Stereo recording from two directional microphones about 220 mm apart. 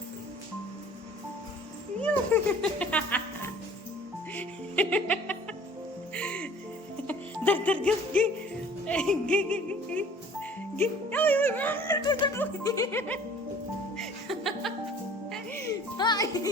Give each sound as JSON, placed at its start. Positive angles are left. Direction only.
{"t": 2.0, "sound": "speech", "side_deg": 5}
{"t": 4.4, "sound": "music", "side_deg": 5}
{"t": 8.9, "sound": "speech", "side_deg": 5}
{"t": 12.0, "sound": "speech", "side_deg": 20}
{"t": 12.4, "sound": "music", "side_deg": 15}
{"t": 15.6, "sound": "music", "side_deg": 20}